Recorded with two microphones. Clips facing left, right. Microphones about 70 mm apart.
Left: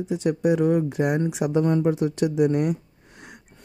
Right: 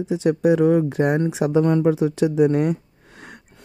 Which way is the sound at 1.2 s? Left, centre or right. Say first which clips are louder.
Right 4 dB; right.